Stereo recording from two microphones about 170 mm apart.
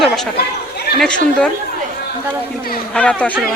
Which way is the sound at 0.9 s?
5° left (ahead or behind).